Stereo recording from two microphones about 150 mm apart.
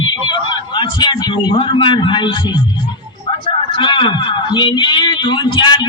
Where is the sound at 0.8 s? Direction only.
30° left (ahead or behind).